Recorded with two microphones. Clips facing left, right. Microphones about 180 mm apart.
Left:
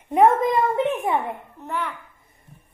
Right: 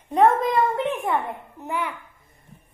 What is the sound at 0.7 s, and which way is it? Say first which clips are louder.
Speech: left 2 dB; 20° left (ahead or behind).